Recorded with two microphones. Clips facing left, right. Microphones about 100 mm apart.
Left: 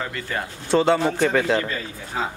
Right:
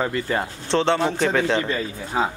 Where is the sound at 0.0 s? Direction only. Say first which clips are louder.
Right 6 dB; 30° right (ahead or behind).